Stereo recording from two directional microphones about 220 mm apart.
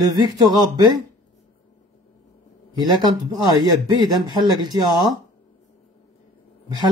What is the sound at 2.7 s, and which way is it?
Speech, 20° right (ahead or behind).